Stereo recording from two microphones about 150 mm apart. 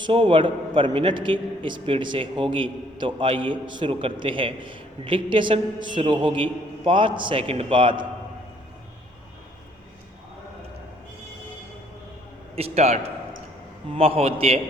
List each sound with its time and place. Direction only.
0.0 s a man's voice: 35° right (ahead or behind)
12.5 s a man's voice: 45° right (ahead or behind)